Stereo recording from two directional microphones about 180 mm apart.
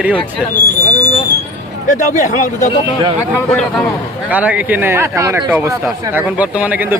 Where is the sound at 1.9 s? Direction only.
45° left (ahead or behind).